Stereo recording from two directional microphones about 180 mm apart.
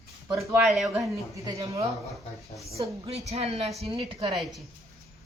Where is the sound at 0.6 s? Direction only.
Centre (ahead or behind).